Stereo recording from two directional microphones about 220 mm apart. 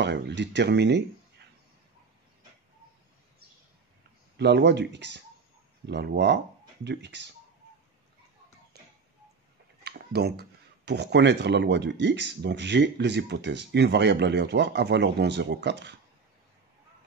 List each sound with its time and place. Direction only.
0.0 s speech: 50° right (ahead or behind)
4.4 s speech: 50° right (ahead or behind)
8.7 s tick-tock: 45° right (ahead or behind)
9.8 s a sound: 45° right (ahead or behind)
10.9 s speech: 50° right (ahead or behind)